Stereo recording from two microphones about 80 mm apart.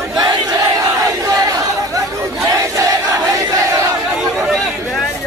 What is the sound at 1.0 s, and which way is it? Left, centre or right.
Chatter, right.